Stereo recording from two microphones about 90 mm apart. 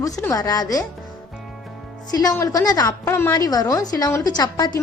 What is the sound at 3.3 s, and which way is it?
Speech, 45° left (ahead or behind).